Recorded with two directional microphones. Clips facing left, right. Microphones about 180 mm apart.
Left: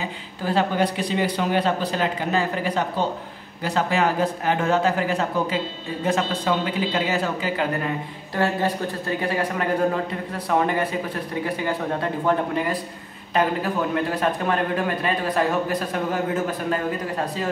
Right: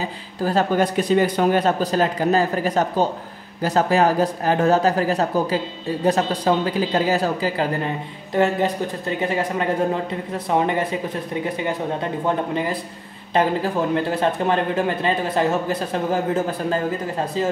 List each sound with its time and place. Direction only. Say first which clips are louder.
0.4 s speech: right 3 dB; 40° right (ahead or behind)
8.3 s a man's voice: right 4 dB; 20° right (ahead or behind)
16.7 s a man's voice: right 2 dB; 25° right (ahead or behind)